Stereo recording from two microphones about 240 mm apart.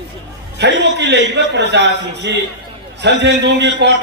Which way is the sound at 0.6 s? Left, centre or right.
Right.